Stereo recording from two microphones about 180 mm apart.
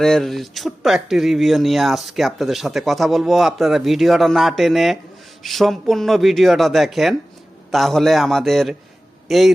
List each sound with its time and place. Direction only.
0.0 s speech: centre (ahead or behind)